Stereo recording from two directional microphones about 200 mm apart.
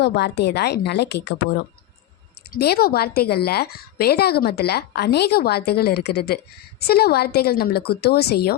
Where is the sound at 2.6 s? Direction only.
50° left (ahead or behind).